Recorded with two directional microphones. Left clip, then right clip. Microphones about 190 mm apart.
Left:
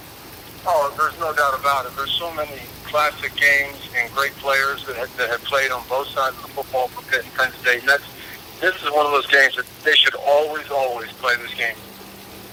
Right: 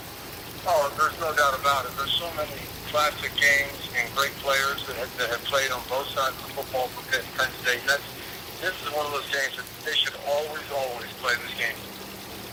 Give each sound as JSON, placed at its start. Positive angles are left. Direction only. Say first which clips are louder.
{"t": 0.6, "sound": "speech", "louder": "left 4 dB", "side_deg": 45}